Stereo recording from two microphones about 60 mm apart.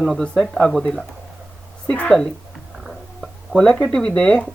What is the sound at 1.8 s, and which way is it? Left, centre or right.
Speech, left.